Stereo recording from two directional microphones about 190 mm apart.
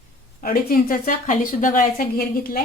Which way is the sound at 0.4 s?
50° left (ahead or behind).